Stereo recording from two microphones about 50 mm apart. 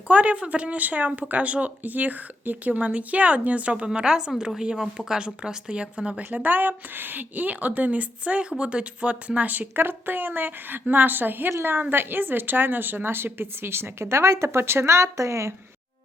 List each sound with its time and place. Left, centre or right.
0.1 s speech: right
3.8 s speech: centre; by 15.5 s right